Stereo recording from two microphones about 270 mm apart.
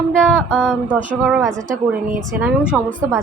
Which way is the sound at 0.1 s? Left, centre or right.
Centre.